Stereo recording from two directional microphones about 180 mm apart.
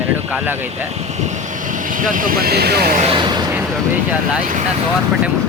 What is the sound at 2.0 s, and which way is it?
Speech, 50° right (ahead or behind).